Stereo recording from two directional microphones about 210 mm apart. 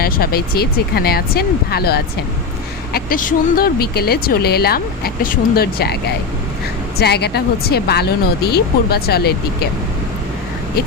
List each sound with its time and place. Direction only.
0.0 s speech: 45° left (ahead or behind)
7.0 s speech: 50° left (ahead or behind)